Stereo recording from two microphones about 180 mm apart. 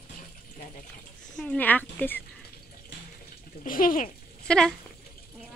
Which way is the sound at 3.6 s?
50° left (ahead or behind).